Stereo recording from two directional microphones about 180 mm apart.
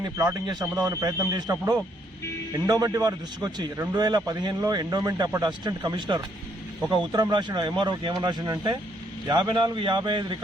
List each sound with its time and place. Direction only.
0.0 s a man's voice: 20° right (ahead or behind)